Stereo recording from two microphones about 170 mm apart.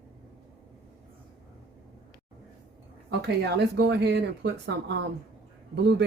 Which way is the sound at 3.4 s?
80° right.